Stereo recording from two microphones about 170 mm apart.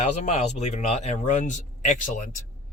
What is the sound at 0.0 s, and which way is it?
Speech, 45° left (ahead or behind).